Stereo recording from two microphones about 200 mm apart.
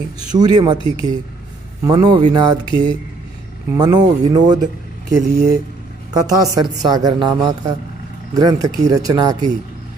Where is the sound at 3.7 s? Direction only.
20° right (ahead or behind).